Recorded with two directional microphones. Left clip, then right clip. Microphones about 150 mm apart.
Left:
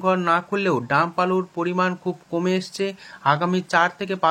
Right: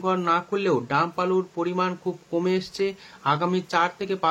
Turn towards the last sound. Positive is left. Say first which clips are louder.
# left 3 dB
turn(degrees=15)  # may be behind; listen again after turning